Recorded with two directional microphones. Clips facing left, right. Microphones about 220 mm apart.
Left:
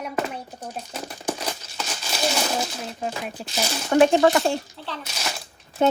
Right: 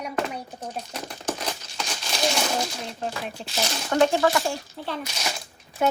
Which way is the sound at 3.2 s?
Centre (ahead or behind).